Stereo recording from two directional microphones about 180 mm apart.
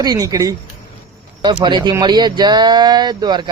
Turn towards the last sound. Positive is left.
turn(degrees=-25)  # may be behind; listen again after turning